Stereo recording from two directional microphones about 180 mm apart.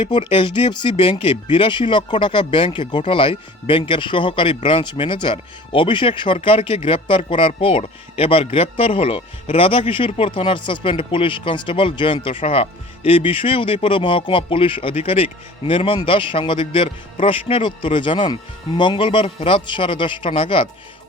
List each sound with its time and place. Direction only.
0.0 s speech: 30° left (ahead or behind)